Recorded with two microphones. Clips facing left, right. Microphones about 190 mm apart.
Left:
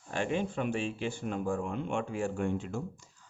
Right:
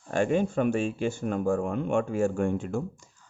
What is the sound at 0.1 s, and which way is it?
Speech, 45° right (ahead or behind).